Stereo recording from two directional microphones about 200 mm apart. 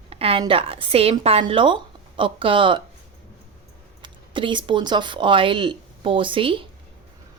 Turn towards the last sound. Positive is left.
turn(degrees=-25)  # may be behind; listen again after turning